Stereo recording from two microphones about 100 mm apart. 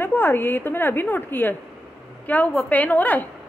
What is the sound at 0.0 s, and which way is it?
A woman's voice, 20° left (ahead or behind).